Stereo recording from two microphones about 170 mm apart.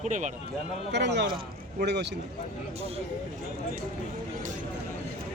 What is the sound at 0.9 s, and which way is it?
Speech, 90° right.